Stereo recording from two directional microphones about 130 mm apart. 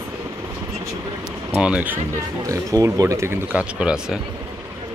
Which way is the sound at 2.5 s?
25° right (ahead or behind).